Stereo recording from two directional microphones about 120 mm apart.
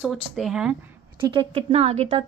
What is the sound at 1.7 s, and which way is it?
Speech, 65° right (ahead or behind).